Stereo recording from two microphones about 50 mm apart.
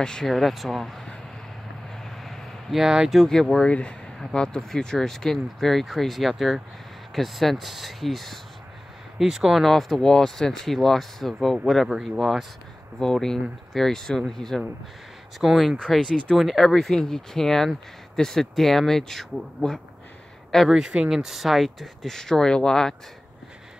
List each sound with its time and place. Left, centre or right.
0.0 s speech: centre
0.3 s speech: centre
2.0 s vehicle: centre
2.8 s speech: centre
3.2 s speech: centre
3.6 s speech: left; by 12.4 s centre
13.0 s speech: centre
20.6 s speech: centre